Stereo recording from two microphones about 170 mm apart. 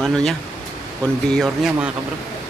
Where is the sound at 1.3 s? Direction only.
Centre (ahead or behind).